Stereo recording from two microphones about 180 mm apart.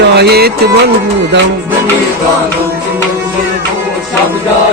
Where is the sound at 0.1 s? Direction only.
65° right (ahead or behind).